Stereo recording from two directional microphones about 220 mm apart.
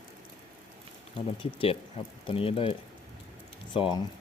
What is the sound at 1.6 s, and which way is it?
Speech, 25° left (ahead or behind).